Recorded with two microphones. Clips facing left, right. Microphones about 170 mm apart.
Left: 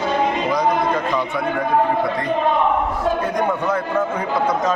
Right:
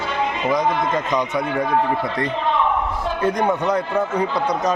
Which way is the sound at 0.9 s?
20° right (ahead or behind).